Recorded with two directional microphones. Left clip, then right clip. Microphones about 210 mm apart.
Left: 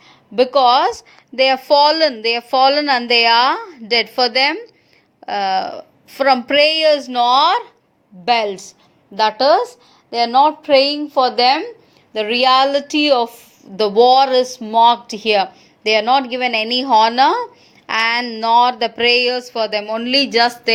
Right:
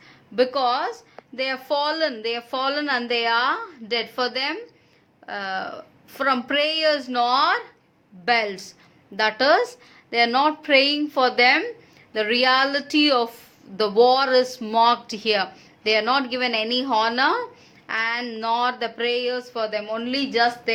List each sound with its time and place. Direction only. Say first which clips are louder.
0.3 s a woman's voice: left 9 dB; 25° left (ahead or behind)